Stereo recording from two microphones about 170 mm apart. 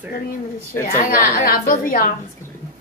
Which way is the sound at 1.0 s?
55° left (ahead or behind).